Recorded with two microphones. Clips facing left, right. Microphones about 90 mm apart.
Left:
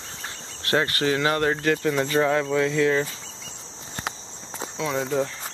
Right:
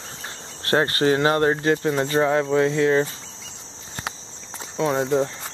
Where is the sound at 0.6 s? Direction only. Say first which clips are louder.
Right 4 dB; 35° right (ahead or behind).